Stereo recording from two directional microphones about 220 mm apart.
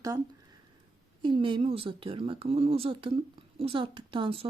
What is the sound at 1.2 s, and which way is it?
Speech, 20° right (ahead or behind).